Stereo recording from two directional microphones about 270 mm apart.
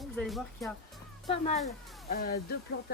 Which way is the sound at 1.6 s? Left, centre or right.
Left.